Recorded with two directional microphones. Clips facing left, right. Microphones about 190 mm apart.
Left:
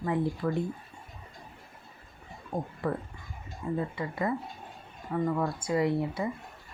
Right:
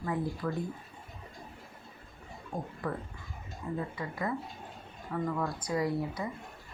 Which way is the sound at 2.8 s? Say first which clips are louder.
Left 4 dB; 25° left (ahead or behind).